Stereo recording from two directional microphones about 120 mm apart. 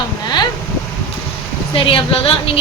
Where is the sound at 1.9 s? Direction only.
50° left (ahead or behind).